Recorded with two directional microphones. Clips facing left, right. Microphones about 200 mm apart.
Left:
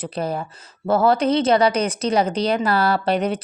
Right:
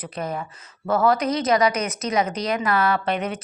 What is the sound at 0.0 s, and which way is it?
A woman's voice, 30° left (ahead or behind).